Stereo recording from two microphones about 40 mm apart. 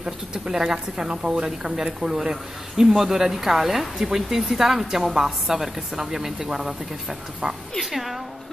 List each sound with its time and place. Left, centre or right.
0.0 s a woman's voice: centre